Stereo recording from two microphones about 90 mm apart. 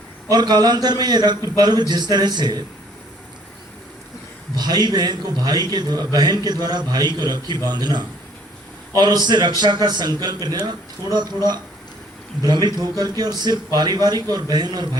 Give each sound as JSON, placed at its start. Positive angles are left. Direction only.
{"t": 0.3, "sound": "a man's voice", "side_deg": -50}
{"t": 4.5, "sound": "a man's voice", "side_deg": -50}